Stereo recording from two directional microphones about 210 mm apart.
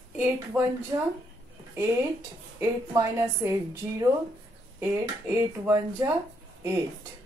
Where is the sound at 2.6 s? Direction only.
15° right (ahead or behind).